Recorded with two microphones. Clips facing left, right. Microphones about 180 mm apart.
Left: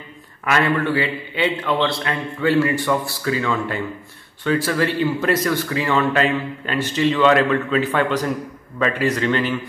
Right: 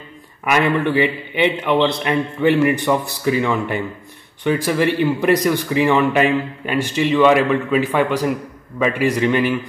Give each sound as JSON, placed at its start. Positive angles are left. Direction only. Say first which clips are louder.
{"t": 0.5, "sound": "speech", "louder": "right 2 dB", "side_deg": -15}